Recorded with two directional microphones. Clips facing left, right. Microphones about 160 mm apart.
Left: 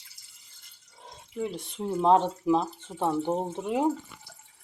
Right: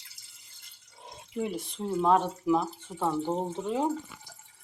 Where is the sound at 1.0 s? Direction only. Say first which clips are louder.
Even; 10° right (ahead or behind).